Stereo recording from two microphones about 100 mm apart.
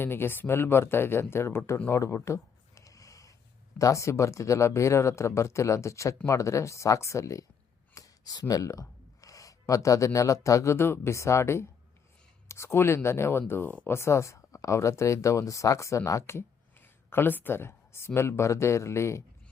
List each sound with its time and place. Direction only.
0.0 s speech: 20° left (ahead or behind)
1.9 s a sound: 30° left (ahead or behind)
3.8 s speech: 35° left (ahead or behind)